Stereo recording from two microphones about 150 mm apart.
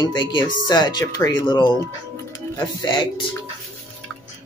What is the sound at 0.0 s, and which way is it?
Speech, 30° left (ahead or behind).